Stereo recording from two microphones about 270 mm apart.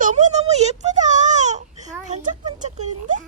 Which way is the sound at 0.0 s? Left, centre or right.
Right.